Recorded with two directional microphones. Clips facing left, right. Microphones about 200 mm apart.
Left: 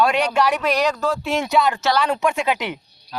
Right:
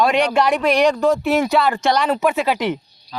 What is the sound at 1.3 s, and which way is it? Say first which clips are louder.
Speech: right 3 dB; 5° right (ahead or behind).